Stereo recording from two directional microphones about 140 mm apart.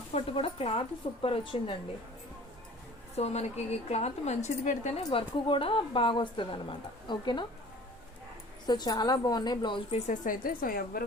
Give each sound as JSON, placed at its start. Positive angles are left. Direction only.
{"t": 0.1, "sound": "speech", "side_deg": 45}
{"t": 3.2, "sound": "a woman's voice", "side_deg": 50}
{"t": 5.0, "sound": "speech", "side_deg": 40}
{"t": 8.6, "sound": "speech", "side_deg": 30}
{"t": 10.1, "sound": "speech", "side_deg": 80}